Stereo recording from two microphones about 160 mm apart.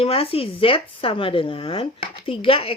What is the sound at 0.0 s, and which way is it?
Speech, 35° left (ahead or behind).